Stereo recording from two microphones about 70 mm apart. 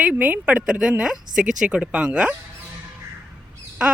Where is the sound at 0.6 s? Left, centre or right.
Centre.